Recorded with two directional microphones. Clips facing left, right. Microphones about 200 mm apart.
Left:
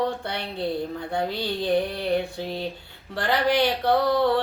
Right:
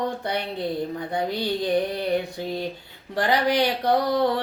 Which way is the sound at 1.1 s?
15° right (ahead or behind).